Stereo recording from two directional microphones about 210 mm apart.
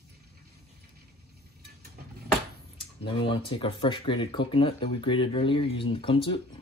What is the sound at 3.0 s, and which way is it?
Speech, 25° left (ahead or behind).